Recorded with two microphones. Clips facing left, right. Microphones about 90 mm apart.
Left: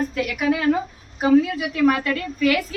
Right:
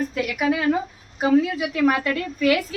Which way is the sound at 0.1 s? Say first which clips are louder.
Left 1 dB; 10° right (ahead or behind).